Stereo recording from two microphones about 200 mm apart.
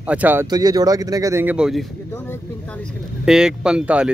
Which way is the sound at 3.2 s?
5° right (ahead or behind).